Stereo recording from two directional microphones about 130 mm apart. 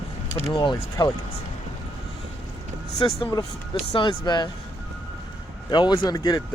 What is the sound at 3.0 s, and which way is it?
Speech, 40° left (ahead or behind).